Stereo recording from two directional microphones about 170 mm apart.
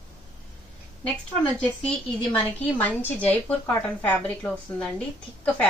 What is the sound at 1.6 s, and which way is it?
A woman's voice, 10° left (ahead or behind).